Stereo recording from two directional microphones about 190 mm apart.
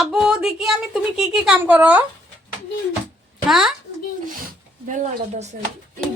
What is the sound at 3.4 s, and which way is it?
Speech, centre (ahead or behind).